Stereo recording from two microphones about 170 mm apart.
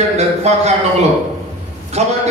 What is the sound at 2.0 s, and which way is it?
Speech, 40° right (ahead or behind).